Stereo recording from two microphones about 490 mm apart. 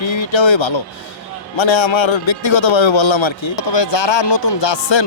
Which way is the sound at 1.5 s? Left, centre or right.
Left.